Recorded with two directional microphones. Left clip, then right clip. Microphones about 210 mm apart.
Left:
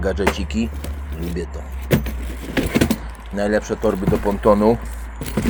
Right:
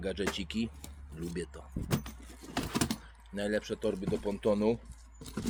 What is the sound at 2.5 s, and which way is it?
Vehicle, 25° right (ahead or behind).